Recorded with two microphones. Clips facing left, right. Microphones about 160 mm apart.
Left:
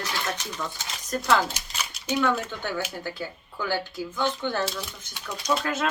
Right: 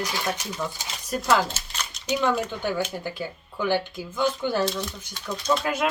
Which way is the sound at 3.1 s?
15° right (ahead or behind).